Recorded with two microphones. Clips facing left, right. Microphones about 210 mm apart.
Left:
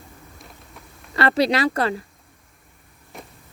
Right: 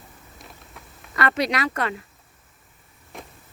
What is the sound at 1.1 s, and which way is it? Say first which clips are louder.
Speech: left 4 dB; 30° left (ahead or behind).